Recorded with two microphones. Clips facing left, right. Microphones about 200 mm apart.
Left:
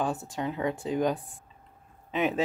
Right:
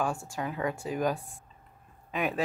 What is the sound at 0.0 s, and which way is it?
Speech, 20° left (ahead or behind).